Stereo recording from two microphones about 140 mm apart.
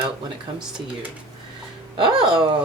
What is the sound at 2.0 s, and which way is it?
Speech, 35° right (ahead or behind).